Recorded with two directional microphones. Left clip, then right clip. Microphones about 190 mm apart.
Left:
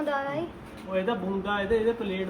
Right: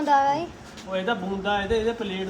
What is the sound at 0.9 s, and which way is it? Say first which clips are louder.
Speech: right 2 dB; 50° right (ahead or behind).